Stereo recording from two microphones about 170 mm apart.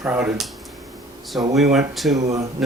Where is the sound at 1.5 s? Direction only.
Centre (ahead or behind).